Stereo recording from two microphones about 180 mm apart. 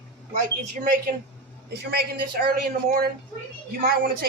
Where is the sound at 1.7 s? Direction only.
60° right (ahead or behind).